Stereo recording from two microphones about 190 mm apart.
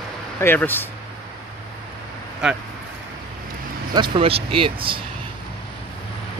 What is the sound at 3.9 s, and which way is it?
Speech, 25° right (ahead or behind).